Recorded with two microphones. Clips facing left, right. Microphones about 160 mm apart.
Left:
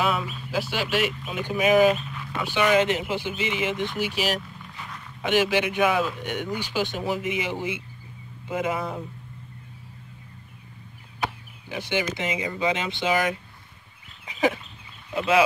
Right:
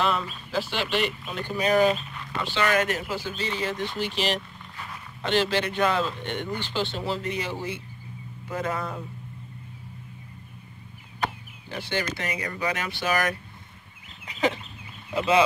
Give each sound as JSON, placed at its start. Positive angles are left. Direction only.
{"t": 0.0, "sound": "speech", "side_deg": 5}
{"t": 11.7, "sound": "speech", "side_deg": 15}
{"t": 15.1, "sound": "speech", "side_deg": 0}